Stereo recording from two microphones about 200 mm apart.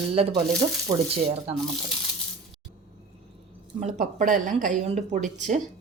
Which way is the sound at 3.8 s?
35° right (ahead or behind).